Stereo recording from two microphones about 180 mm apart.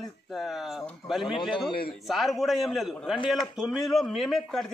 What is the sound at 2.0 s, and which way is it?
A man's voice, centre (ahead or behind).